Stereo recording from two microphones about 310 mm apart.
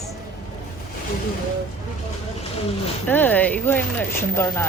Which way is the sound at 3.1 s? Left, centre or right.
Centre.